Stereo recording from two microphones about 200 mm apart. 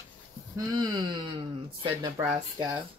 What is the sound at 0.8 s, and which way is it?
Speech, 20° right (ahead or behind).